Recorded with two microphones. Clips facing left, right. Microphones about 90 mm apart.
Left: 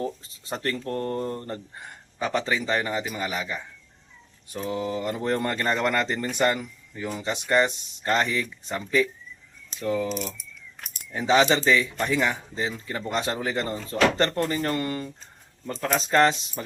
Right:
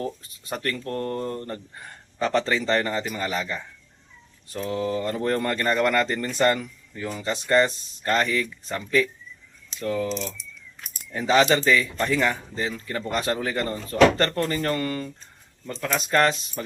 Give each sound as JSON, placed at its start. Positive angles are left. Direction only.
{"t": 0.0, "sound": "speech", "side_deg": 25}
{"t": 15.7, "sound": "speech", "side_deg": 35}